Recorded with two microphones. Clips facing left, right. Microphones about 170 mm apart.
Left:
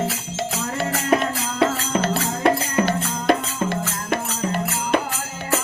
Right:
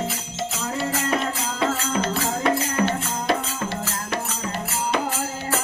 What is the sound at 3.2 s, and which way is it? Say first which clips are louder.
Music: left 6 dB; 55° left (ahead or behind).